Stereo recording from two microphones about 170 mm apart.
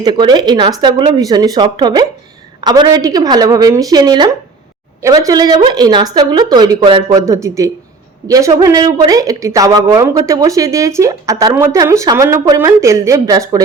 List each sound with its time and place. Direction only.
0.0 s speech: 25° right (ahead or behind)